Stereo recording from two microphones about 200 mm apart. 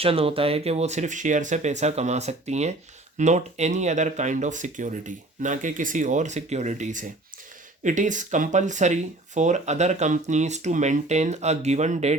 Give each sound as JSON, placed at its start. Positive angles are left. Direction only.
{"t": 0.0, "sound": "speech", "side_deg": -30}